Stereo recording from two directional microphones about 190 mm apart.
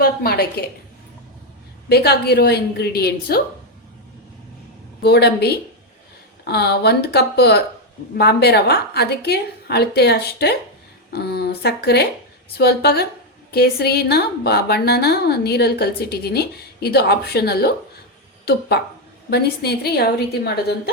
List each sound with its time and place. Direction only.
0.0 s a woman's voice: 55° left (ahead or behind)
1.9 s a woman's voice: 55° left (ahead or behind)
5.0 s a woman's voice: 60° left (ahead or behind)
19.3 s a woman's voice: 55° left (ahead or behind)